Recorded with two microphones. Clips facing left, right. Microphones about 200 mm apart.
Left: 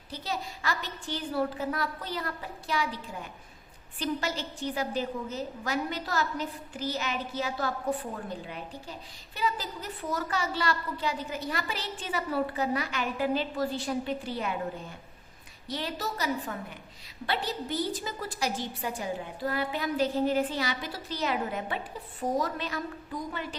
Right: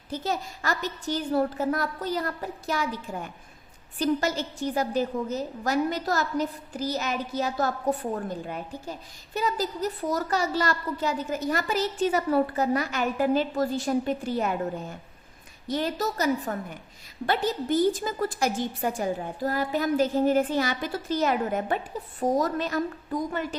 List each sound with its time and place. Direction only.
0.1 s a woman's voice: 45° right (ahead or behind)